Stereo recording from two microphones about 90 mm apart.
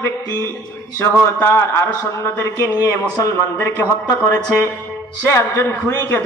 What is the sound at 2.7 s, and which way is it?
Speech, 45° left (ahead or behind).